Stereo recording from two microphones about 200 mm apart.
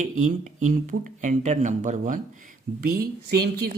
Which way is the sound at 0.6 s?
40° right (ahead or behind).